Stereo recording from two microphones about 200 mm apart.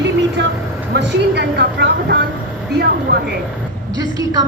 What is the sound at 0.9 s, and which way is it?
Speech, 55° right (ahead or behind).